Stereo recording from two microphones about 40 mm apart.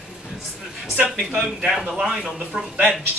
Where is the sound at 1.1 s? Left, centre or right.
Centre.